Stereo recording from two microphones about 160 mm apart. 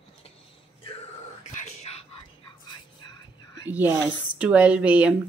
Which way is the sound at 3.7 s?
10° right (ahead or behind).